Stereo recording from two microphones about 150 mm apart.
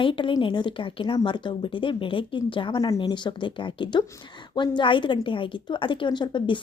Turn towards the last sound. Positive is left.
turn(degrees=35)  # may be behind; listen again after turning